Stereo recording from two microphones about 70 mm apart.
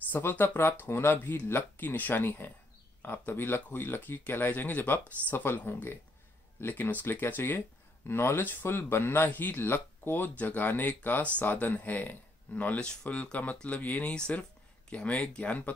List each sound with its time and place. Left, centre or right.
0.1 s speech: left